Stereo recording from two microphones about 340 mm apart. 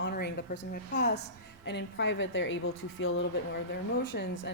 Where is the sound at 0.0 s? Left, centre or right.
Left.